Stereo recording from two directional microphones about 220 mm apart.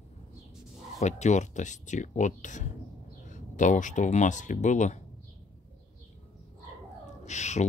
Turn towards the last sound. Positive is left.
turn(degrees=30)  # may be behind; listen again after turning